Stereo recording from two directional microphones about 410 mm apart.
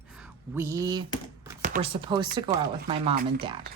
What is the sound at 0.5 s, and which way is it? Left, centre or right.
Speech, centre.